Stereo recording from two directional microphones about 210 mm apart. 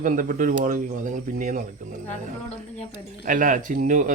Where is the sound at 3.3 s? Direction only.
40° right (ahead or behind).